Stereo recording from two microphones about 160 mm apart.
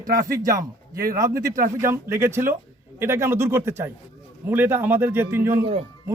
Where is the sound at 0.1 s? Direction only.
70° right (ahead or behind).